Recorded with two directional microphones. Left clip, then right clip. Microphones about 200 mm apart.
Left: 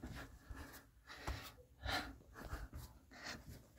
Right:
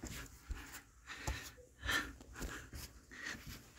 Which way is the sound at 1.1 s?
15° left (ahead or behind).